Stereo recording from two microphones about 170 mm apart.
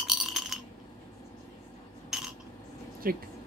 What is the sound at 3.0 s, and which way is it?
Speech, 60° right (ahead or behind).